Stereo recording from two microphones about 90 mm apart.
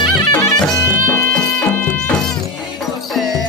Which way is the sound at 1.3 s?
15° left (ahead or behind).